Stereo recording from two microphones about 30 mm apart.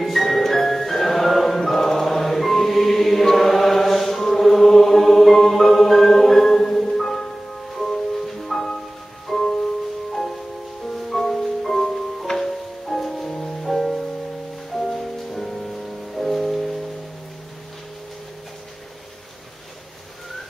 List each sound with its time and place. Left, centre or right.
0.0 s music: centre
8.3 s music: centre
10.9 s music: centre
13.3 s music: left
13.6 s music: centre